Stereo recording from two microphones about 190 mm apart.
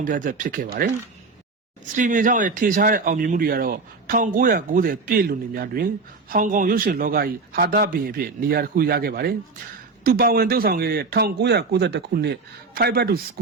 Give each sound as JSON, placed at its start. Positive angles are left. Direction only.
{"t": 0.0, "sound": "speech", "side_deg": -45}
{"t": 2.0, "sound": "a man's voice", "side_deg": -45}